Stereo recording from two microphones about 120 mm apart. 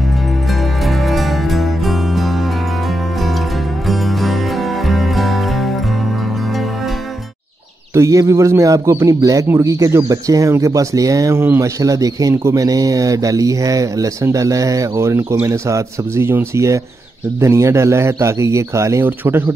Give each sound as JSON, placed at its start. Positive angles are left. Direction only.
{"t": 0.8, "sound": "music", "side_deg": 0}
{"t": 3.8, "sound": "music", "side_deg": 0}
{"t": 7.9, "sound": "speech", "side_deg": -25}